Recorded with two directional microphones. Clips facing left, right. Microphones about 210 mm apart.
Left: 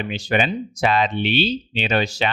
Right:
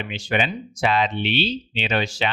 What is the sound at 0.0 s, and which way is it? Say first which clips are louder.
Speech: left 3 dB; 40° left (ahead or behind).